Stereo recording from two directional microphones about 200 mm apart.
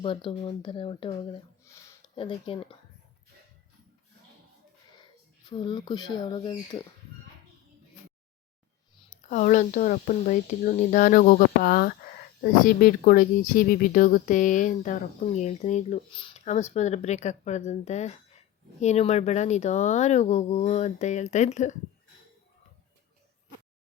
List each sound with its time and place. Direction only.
0.0 s speech: 25° left (ahead or behind)
1.6 s a sound: 15° left (ahead or behind)
2.1 s speech: 25° left (ahead or behind)
5.5 s speech: 25° left (ahead or behind)
9.0 s speech: 40° left (ahead or behind)